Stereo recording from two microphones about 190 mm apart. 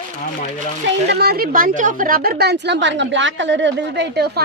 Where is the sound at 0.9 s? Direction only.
60° right (ahead or behind).